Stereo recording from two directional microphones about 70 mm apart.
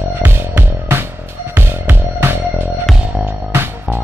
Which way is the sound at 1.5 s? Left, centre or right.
Right.